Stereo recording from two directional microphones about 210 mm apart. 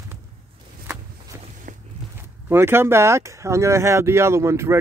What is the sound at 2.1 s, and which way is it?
Speech, 10° right (ahead or behind).